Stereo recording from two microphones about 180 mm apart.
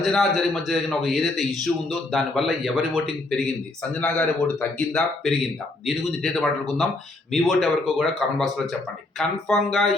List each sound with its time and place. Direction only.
0.0 s a man's voice: centre (ahead or behind)